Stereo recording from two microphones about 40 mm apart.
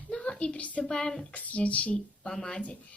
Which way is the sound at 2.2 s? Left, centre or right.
Centre.